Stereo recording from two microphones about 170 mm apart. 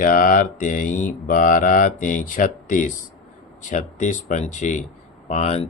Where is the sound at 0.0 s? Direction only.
55° left (ahead or behind).